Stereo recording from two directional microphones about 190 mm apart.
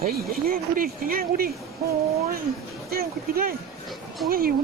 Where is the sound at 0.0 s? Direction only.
50° right (ahead or behind).